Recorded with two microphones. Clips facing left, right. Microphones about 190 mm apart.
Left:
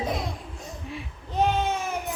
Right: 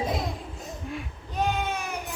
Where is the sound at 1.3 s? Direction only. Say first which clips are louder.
Left 4 dB; 25° left (ahead or behind).